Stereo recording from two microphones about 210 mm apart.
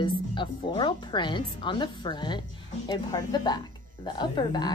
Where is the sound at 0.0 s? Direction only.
20° left (ahead or behind).